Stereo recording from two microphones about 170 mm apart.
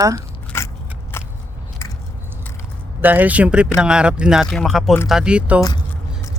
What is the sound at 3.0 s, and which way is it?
Speech, 10° right (ahead or behind).